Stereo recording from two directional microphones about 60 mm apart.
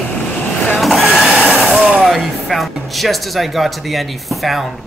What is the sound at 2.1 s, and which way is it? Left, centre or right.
Speech, centre.